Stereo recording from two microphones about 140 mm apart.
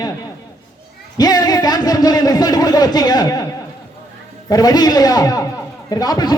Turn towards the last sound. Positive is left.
turn(degrees=30)  # may be behind; listen again after turning